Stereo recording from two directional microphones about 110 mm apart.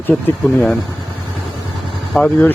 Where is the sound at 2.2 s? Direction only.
15° left (ahead or behind).